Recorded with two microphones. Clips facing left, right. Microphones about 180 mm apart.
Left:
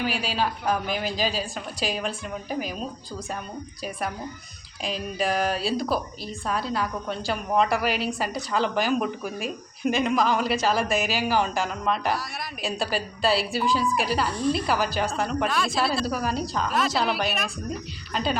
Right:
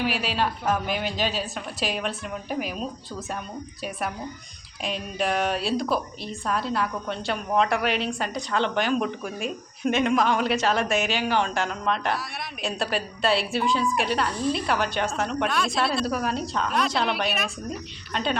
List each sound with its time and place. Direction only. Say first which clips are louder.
0.0 s a woman's voice: right 1 dB; centre (ahead or behind)
4.8 s a woman's voice: even; centre (ahead or behind)